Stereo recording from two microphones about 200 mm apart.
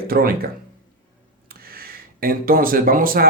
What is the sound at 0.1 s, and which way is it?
Speech, 50° right (ahead or behind).